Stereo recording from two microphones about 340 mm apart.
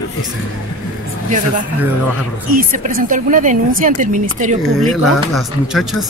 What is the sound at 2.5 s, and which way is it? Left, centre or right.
A woman's voice, right.